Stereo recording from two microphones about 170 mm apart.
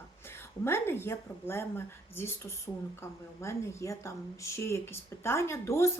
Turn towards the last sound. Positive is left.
turn(degrees=15)  # may be behind; listen again after turning